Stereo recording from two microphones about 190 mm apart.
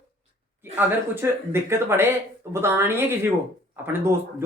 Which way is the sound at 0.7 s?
10° right (ahead or behind).